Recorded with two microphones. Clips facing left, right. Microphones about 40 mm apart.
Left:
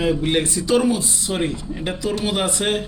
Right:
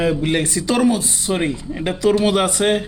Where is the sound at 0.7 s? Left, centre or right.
Right.